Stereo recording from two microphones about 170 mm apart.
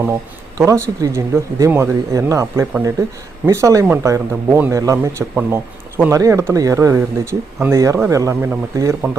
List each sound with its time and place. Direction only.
0.5 s speech: 20° right (ahead or behind)